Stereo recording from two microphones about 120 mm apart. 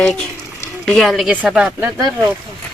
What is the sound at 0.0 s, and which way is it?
Speech, 5° left (ahead or behind).